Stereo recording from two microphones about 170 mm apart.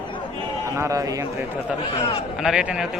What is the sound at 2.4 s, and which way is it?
Speech, 5° right (ahead or behind).